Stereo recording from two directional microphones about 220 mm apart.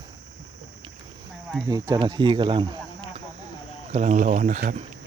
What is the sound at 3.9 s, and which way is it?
Speech, 30° right (ahead or behind).